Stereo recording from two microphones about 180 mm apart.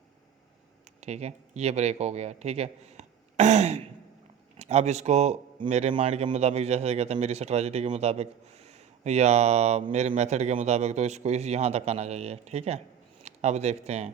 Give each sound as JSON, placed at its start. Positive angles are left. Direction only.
{"t": 1.0, "sound": "speech", "side_deg": -40}